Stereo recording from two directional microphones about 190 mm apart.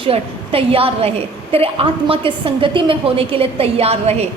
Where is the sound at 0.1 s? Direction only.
30° right (ahead or behind).